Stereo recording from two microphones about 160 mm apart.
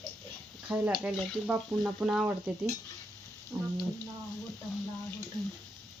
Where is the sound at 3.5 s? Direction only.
20° right (ahead or behind).